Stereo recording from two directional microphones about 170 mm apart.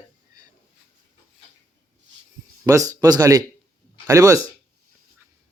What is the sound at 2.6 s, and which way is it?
Speech, 20° right (ahead or behind).